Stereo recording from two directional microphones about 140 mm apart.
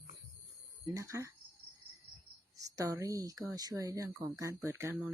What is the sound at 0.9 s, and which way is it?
Speech, 20° right (ahead or behind).